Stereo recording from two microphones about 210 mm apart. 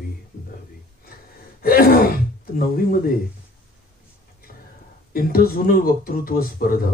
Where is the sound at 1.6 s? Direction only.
45° left (ahead or behind).